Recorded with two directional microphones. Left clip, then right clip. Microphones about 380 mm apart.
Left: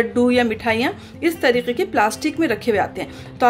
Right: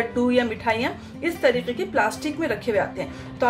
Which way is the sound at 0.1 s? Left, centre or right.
Left.